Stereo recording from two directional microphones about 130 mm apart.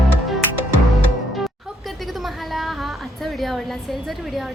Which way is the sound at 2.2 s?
Centre (ahead or behind).